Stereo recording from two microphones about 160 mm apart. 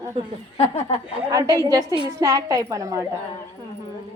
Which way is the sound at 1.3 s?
25° right (ahead or behind).